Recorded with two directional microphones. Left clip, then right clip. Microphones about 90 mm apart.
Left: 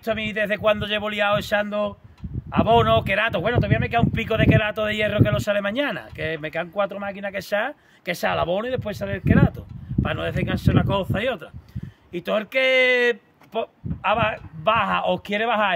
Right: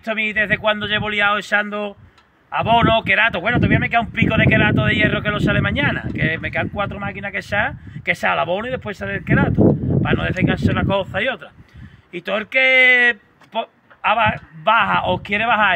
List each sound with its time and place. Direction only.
0.0 s speech: 40° left (ahead or behind)
3.1 s speech: 40° left (ahead or behind)
12.1 s speech: 50° left (ahead or behind)